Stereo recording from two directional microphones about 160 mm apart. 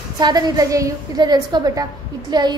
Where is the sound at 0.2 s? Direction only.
25° right (ahead or behind).